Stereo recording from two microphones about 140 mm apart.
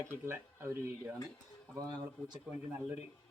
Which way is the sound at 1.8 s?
30° right (ahead or behind).